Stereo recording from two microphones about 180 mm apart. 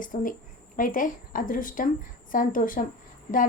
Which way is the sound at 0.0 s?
50° left (ahead or behind).